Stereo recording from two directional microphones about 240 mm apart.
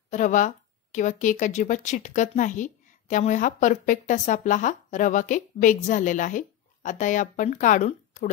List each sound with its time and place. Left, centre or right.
0.1 s speech: left